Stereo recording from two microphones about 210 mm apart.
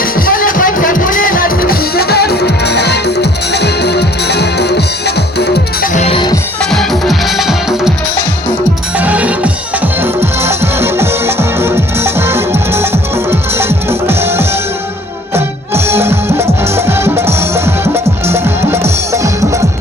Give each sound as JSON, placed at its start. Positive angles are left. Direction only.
{"t": 0.0, "sound": "music", "side_deg": 45}
{"t": 5.9, "sound": "music", "side_deg": 30}
{"t": 6.7, "sound": "music", "side_deg": 0}
{"t": 9.0, "sound": "music", "side_deg": -5}